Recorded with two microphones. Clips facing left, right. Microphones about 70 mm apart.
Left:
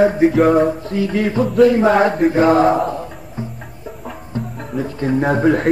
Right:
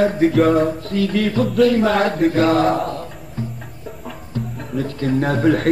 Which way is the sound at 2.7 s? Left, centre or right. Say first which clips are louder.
Left 3 dB; centre.